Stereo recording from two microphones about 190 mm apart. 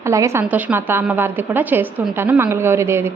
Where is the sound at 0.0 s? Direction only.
15° right (ahead or behind).